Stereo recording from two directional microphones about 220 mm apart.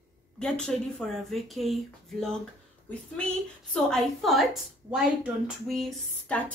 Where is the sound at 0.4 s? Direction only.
5° left (ahead or behind).